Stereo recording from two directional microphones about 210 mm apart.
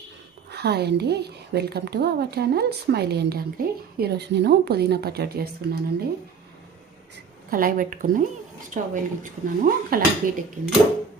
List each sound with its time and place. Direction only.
0.5 s a woman's voice: 50° right (ahead or behind)
7.5 s a woman's voice: 45° right (ahead or behind)